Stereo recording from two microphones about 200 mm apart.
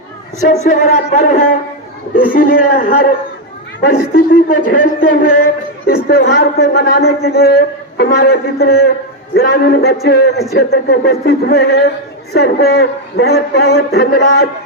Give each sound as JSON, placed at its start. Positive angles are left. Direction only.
{"t": 0.6, "sound": "a man's voice", "side_deg": 35}